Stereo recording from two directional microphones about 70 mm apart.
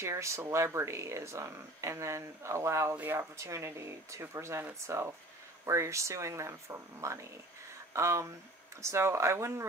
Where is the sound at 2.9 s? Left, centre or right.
Right.